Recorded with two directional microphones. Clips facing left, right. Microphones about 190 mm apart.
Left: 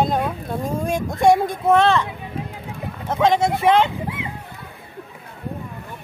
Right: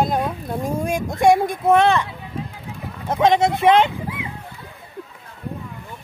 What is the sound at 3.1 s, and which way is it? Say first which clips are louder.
Speech: right 1 dB; 20° right (ahead or behind).